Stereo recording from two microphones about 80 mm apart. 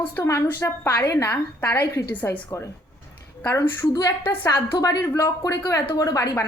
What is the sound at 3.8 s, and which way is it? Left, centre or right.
Speech, left.